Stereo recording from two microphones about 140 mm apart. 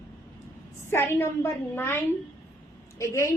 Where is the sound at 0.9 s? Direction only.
15° left (ahead or behind).